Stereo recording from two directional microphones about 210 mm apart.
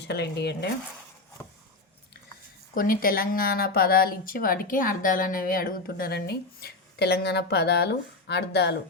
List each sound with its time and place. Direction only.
0.1 s speech: 50° left (ahead or behind)
2.7 s speech: 40° left (ahead or behind)